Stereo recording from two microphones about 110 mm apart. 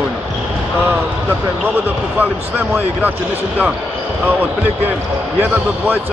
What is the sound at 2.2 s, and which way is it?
Speech, 15° right (ahead or behind).